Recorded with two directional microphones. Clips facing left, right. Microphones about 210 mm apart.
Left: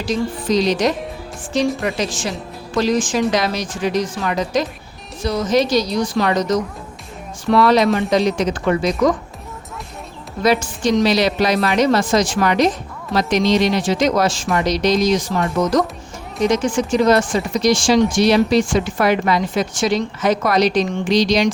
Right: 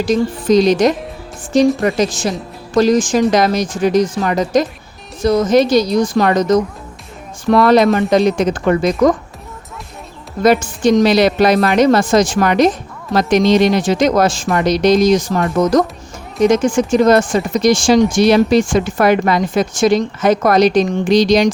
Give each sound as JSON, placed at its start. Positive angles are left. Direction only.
{"t": 0.0, "sound": "speech", "side_deg": -50}
{"t": 2.0, "sound": "speech", "side_deg": -40}
{"t": 10.4, "sound": "speech", "side_deg": -50}
{"t": 16.5, "sound": "speech", "side_deg": -45}